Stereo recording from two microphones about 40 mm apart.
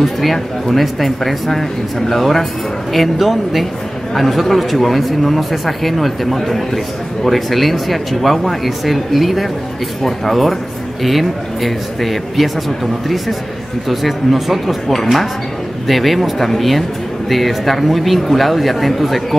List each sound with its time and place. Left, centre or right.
0.0 s speech: centre